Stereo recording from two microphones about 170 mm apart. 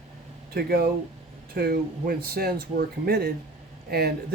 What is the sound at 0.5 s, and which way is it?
Speech, 65° right (ahead or behind).